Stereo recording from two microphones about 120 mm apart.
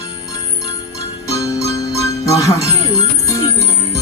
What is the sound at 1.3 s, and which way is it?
Music, 25° left (ahead or behind).